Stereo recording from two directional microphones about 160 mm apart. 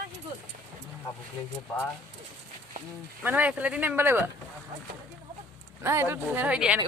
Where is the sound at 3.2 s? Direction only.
10° right (ahead or behind).